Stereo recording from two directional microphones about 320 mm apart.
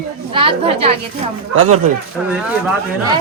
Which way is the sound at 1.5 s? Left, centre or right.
Right.